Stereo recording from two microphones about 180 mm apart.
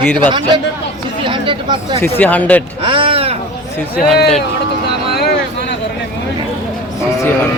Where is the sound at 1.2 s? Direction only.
25° right (ahead or behind).